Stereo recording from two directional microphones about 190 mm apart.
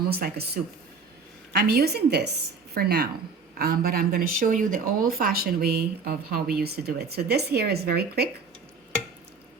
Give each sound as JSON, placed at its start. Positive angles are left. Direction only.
{"t": 0.0, "sound": "a woman's voice", "side_deg": -55}